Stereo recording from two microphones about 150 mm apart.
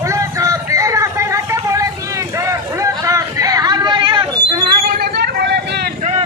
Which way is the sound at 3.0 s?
20° right (ahead or behind).